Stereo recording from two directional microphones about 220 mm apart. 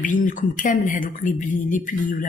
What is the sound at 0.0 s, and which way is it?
Speech, 35° left (ahead or behind).